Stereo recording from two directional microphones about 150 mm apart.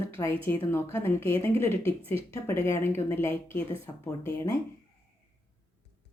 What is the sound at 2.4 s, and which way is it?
A woman's voice, 15° left (ahead or behind).